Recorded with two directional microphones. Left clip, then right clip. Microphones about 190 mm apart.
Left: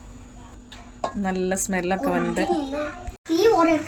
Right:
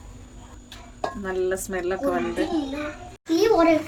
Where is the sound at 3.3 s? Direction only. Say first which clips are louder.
Right 1 dB; centre (ahead or behind).